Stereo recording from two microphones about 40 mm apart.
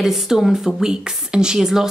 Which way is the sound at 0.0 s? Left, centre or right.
Centre.